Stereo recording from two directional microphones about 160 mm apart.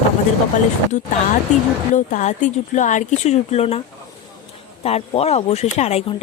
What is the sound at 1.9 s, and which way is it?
A woman's voice, 50° left (ahead or behind).